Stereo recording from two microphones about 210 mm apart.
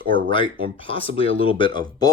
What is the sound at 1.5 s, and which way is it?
Speech, 20° left (ahead or behind).